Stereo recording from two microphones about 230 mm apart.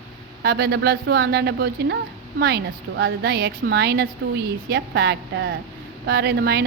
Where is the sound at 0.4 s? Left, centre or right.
Right.